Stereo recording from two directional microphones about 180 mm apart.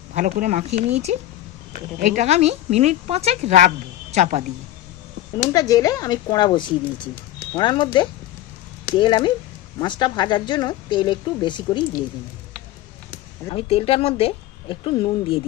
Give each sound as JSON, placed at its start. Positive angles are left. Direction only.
{"t": 0.1, "sound": "speech", "side_deg": -45}
{"t": 5.5, "sound": "speech", "side_deg": 20}
{"t": 13.5, "sound": "a woman's voice", "side_deg": 30}